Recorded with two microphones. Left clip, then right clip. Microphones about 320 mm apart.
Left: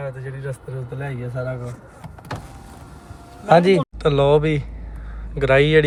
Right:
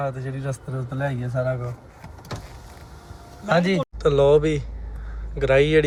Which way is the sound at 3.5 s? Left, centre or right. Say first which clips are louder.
Left 7 dB; centre.